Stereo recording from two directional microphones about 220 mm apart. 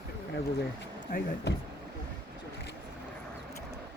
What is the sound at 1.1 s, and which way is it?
Speech, 40° left (ahead or behind).